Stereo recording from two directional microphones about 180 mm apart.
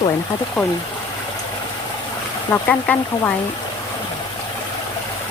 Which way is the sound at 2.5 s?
10° left (ahead or behind).